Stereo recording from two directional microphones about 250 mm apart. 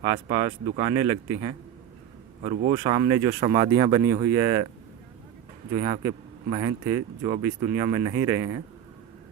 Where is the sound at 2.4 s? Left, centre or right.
Right.